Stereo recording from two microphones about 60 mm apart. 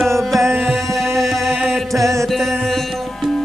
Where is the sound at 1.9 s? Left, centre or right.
Right.